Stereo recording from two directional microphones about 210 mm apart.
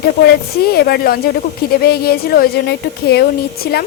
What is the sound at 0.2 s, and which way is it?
Speech, 50° left (ahead or behind).